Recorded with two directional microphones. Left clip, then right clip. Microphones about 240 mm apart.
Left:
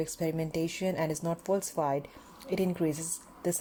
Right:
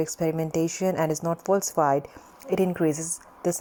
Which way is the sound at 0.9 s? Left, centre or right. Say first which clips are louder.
Right 6 dB; centre.